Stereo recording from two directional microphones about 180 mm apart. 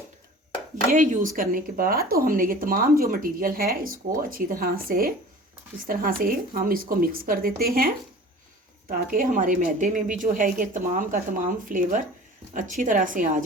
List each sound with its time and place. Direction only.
0.9 s speech: 45° right (ahead or behind)